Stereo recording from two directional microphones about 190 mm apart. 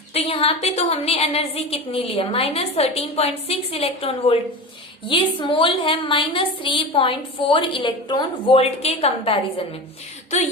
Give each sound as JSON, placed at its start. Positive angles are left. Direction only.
{"t": 0.1, "sound": "a woman's voice", "side_deg": 30}